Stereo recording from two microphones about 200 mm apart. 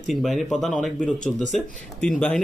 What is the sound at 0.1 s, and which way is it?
Speech, centre (ahead or behind).